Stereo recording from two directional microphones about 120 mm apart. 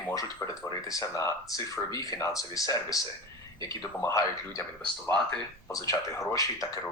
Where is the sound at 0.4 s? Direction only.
30° left (ahead or behind).